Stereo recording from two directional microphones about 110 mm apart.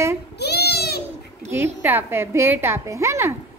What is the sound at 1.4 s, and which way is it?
A woman's voice, 20° right (ahead or behind).